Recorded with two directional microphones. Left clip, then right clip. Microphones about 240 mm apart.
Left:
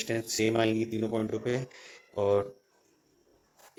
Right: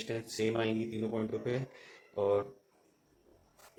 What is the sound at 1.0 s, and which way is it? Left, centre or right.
Speech, left.